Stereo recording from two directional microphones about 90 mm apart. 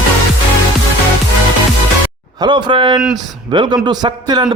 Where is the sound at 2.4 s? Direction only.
60° right (ahead or behind).